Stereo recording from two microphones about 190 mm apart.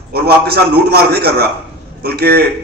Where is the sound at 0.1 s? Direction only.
55° right (ahead or behind).